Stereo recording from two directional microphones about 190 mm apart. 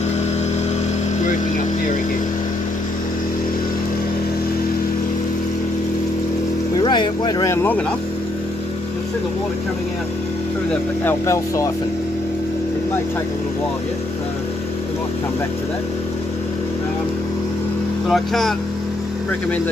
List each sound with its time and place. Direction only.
6.8 s speech: 25° left (ahead or behind)
11.1 s speech: 15° left (ahead or behind)
18.0 s speech: centre (ahead or behind)